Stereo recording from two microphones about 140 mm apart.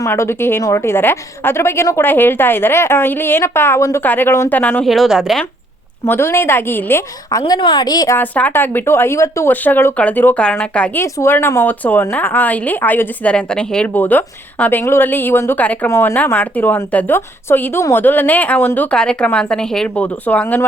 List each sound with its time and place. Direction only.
0.0 s speech: 20° left (ahead or behind)
4.9 s a woman's voice: centre (ahead or behind)
6.1 s a woman's voice: 15° left (ahead or behind)
8.1 s speech: 10° left (ahead or behind)